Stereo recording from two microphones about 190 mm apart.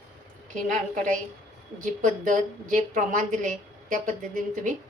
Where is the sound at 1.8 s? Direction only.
45° right (ahead or behind).